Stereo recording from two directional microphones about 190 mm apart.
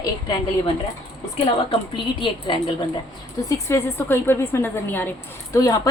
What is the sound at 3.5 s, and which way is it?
A woman's voice, 15° left (ahead or behind).